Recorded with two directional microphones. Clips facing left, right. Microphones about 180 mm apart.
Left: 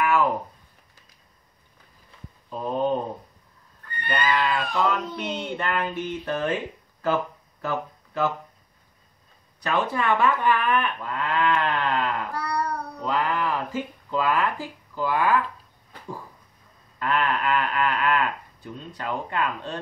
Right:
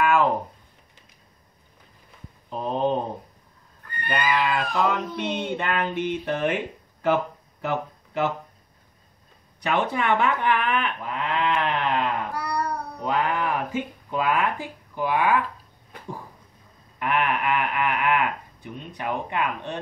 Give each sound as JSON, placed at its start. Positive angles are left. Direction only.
{"t": 2.5, "sound": "a sound", "side_deg": -20}
{"t": 3.8, "sound": "bleat", "side_deg": -10}
{"t": 5.9, "sound": "speech", "side_deg": -20}
{"t": 9.6, "sound": "speech", "side_deg": -20}
{"t": 17.0, "sound": "speech", "side_deg": -20}